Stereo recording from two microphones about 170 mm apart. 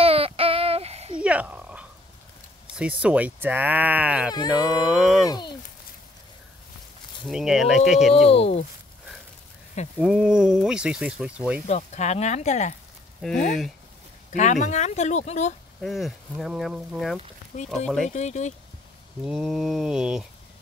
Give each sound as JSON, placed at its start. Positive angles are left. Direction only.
{"t": 0.0, "sound": "a sound", "side_deg": -35}
{"t": 1.2, "sound": "frog", "side_deg": -10}
{"t": 2.7, "sound": "speech", "side_deg": -5}
{"t": 5.2, "sound": "speech", "side_deg": 25}
{"t": 7.2, "sound": "speech", "side_deg": -5}
{"t": 8.1, "sound": "speech", "side_deg": 35}
{"t": 10.0, "sound": "speech", "side_deg": -5}
{"t": 11.6, "sound": "speech", "side_deg": 40}
{"t": 14.3, "sound": "speech", "side_deg": 45}
{"t": 15.8, "sound": "speech", "side_deg": 0}
{"t": 18.1, "sound": "speech", "side_deg": 45}
{"t": 19.2, "sound": "speech", "side_deg": 0}